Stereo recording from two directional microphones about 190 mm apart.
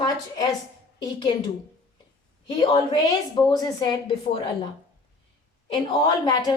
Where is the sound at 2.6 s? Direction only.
25° left (ahead or behind).